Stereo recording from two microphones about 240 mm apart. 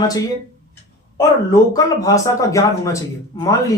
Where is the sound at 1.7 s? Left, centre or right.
Centre.